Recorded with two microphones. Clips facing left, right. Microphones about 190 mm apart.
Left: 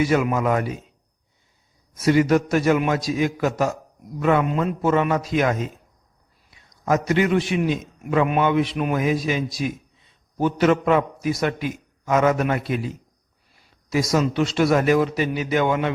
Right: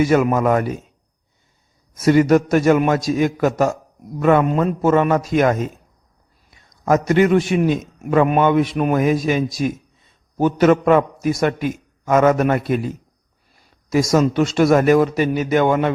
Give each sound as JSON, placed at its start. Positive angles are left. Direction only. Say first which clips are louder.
{"t": 0.0, "sound": "a man's voice", "louder": "right 4 dB", "side_deg": -45}
{"t": 2.0, "sound": "a man's voice", "louder": "right 4 dB", "side_deg": -45}